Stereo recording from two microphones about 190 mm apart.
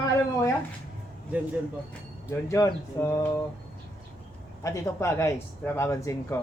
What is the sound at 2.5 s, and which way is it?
Speech, 15° left (ahead or behind).